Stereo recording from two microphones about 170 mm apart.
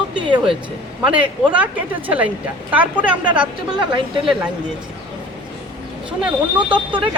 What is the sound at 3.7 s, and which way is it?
Speech, 30° right (ahead or behind).